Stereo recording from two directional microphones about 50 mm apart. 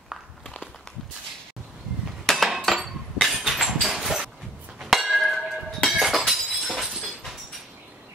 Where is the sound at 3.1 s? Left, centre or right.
Centre.